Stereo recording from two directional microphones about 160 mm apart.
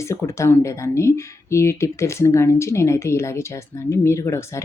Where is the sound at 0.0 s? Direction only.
20° left (ahead or behind).